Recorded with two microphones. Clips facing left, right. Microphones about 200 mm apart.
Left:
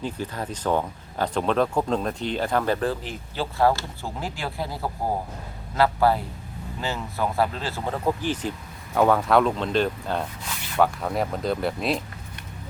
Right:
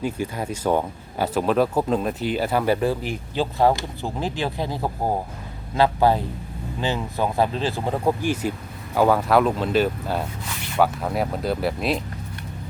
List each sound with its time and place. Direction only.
0.0 s a man's voice: 10° right (ahead or behind)